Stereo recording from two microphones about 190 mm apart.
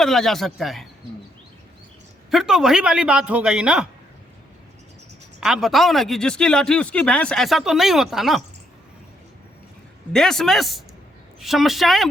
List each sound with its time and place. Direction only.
0.0 s speech: centre (ahead or behind)
2.3 s speech: 5° right (ahead or behind)
5.4 s speech: centre (ahead or behind)
10.1 s speech: 5° left (ahead or behind)